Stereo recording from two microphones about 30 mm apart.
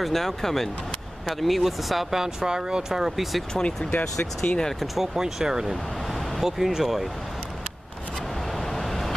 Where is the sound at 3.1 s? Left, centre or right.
Centre.